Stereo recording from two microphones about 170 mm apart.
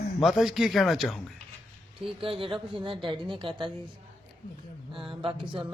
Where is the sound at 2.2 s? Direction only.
30° right (ahead or behind).